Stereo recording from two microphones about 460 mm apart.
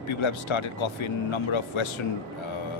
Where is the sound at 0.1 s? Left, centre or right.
Left.